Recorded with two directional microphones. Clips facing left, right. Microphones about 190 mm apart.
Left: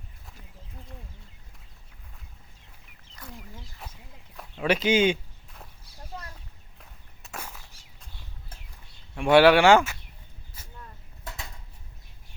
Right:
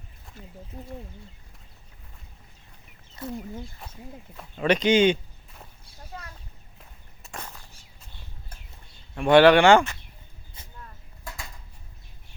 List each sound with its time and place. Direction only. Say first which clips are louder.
3.2 s speech: right 11 dB; 25° right (ahead or behind)
3.8 s speech: right 6 dB; 5° left (ahead or behind)
6.7 s walk: right 1 dB; centre (ahead or behind)
9.1 s speech: right 2 dB; 5° left (ahead or behind)